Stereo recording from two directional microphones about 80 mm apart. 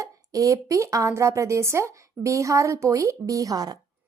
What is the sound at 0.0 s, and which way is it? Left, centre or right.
Speech, right.